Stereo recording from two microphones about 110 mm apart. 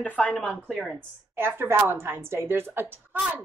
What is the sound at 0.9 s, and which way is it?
A woman's voice, 20° right (ahead or behind).